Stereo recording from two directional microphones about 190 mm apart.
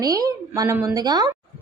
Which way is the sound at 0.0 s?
20° right (ahead or behind).